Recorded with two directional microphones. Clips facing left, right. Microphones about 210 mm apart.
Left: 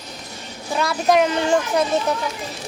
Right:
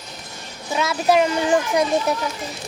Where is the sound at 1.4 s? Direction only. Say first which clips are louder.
Even; 15° right (ahead or behind).